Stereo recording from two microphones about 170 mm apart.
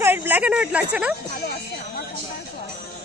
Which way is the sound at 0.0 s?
15° right (ahead or behind).